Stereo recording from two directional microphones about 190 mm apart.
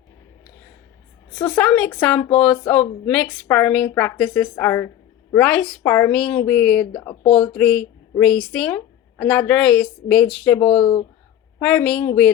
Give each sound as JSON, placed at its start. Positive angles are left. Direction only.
{"t": 1.4, "sound": "speech", "side_deg": 15}
{"t": 1.6, "sound": "speech", "side_deg": 5}